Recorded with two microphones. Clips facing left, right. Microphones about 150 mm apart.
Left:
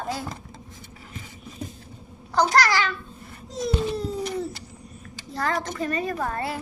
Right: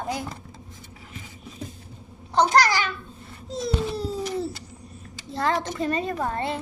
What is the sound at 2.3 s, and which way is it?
Speech, 20° right (ahead or behind).